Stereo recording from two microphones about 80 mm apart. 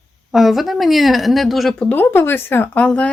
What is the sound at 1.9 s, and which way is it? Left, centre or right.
Speech, left.